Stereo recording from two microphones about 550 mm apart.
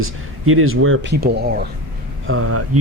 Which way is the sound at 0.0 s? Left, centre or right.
Right.